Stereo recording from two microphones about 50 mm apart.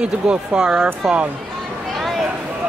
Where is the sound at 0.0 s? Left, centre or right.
Centre.